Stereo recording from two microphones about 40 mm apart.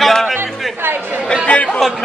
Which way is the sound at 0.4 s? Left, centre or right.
Right.